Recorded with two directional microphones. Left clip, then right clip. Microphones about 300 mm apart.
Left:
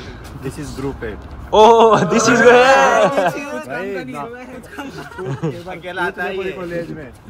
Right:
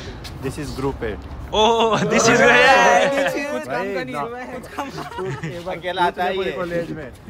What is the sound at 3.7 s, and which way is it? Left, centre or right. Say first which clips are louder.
Speech: right 1 dB; centre.